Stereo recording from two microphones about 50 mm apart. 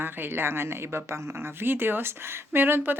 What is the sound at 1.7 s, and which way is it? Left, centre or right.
A woman's voice, right.